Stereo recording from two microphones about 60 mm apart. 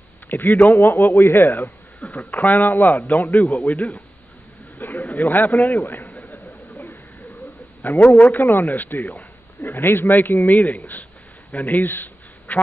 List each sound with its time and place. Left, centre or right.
0.3 s a man's voice: left
3.3 s a man's voice: centre
3.6 s speech: left
4.7 s a sound: left
5.1 s a man's voice: left
5.5 s a man's voice: centre
5.8 s a sound: left
7.9 s speech: left
8.4 s speech: left
11.5 s a sound: left